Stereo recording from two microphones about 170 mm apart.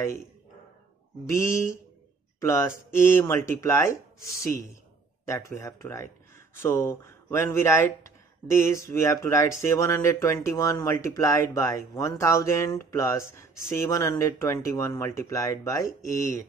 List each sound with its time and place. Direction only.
1.3 s speech: 15° left (ahead or behind)
5.2 s speech: 20° left (ahead or behind)